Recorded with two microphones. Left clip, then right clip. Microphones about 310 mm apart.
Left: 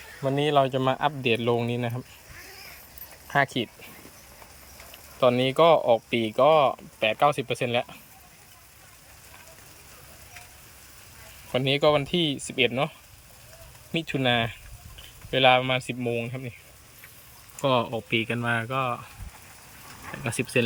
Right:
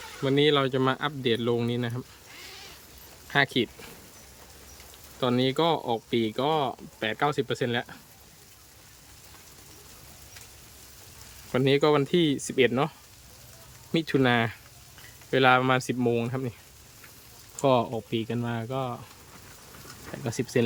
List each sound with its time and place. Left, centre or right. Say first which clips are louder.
0.3 s speech: left 1 dB; centre
3.2 s speech: even; centre
5.2 s speech: left 5 dB; centre
11.5 s speech: left 1 dB; centre
13.9 s speech: right 1 dB; centre
17.6 s speech: even; centre
20.2 s speech: left 1 dB; centre